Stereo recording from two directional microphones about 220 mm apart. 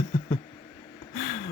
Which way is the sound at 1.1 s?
35° left (ahead or behind).